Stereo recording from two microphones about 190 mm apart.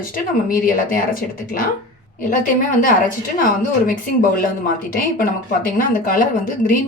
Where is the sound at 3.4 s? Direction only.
45° left (ahead or behind).